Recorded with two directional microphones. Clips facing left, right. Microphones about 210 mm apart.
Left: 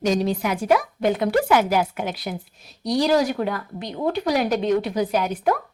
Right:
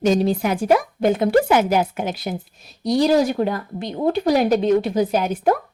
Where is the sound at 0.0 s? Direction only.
30° right (ahead or behind).